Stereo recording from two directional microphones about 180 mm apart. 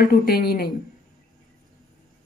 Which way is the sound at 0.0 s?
60° left (ahead or behind).